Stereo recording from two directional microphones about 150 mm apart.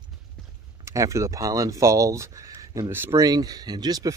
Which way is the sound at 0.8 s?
20° right (ahead or behind).